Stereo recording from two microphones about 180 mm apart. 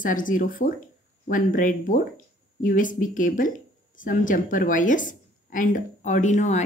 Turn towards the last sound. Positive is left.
turn(degrees=40)  # may be behind; listen again after turning